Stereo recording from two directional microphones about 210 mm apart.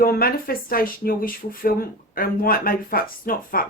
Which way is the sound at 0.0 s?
45° left (ahead or behind).